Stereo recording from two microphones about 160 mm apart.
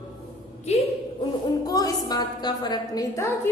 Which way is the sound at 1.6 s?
25° left (ahead or behind).